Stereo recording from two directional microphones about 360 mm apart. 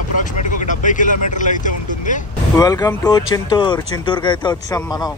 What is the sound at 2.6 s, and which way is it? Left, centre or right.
Speech, centre.